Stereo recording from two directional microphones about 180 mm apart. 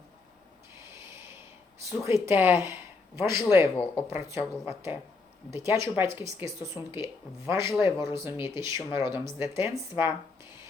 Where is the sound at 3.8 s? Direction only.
25° left (ahead or behind).